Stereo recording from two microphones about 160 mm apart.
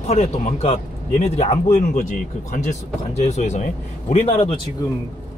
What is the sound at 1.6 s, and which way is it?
Speech, 60° left (ahead or behind).